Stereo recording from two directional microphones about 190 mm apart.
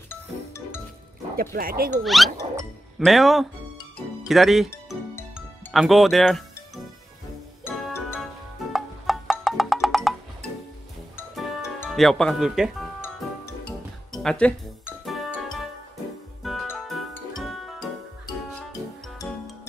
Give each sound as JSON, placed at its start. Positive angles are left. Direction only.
{"t": 0.1, "sound": "music", "side_deg": 10}
{"t": 1.3, "sound": "speech", "side_deg": -50}
{"t": 2.0, "sound": "speech", "side_deg": 0}
{"t": 8.7, "sound": "music", "side_deg": 0}
{"t": 11.3, "sound": "music", "side_deg": 0}
{"t": 14.2, "sound": "music", "side_deg": 5}
{"t": 16.4, "sound": "music", "side_deg": 0}